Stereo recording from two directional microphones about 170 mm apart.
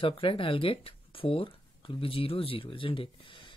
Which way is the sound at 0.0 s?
30° left (ahead or behind).